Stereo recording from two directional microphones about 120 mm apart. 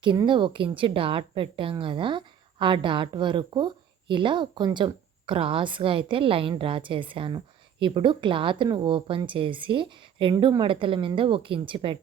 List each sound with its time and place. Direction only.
0.3 s a woman's voice: 45° right (ahead or behind)